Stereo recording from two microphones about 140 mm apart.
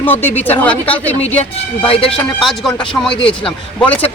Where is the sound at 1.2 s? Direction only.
45° left (ahead or behind).